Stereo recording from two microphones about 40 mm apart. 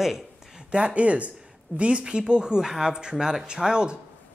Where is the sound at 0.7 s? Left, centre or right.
Right.